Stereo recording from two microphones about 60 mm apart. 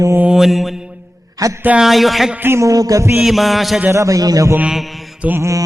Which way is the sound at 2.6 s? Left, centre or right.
Right.